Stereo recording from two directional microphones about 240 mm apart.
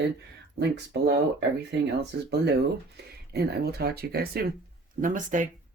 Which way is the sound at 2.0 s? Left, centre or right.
Right.